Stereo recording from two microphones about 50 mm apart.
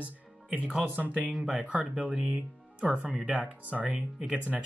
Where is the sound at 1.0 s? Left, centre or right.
Right.